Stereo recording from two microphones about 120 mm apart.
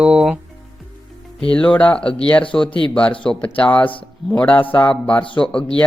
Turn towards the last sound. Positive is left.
turn(degrees=10)  # may be behind; listen again after turning